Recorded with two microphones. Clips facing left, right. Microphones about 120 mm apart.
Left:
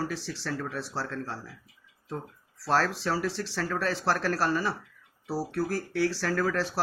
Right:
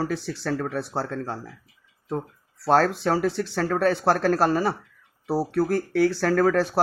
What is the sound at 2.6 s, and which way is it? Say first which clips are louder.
Speech: right 7 dB; 55° right (ahead or behind).